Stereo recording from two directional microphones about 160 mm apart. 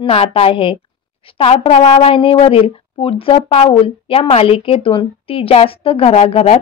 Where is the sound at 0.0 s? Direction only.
35° left (ahead or behind).